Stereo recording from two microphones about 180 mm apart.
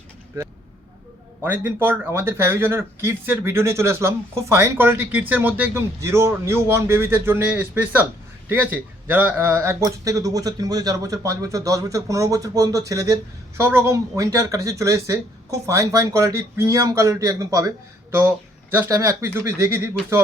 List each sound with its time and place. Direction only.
1.4 s speech: 10° right (ahead or behind)
18.7 s speech: 15° right (ahead or behind)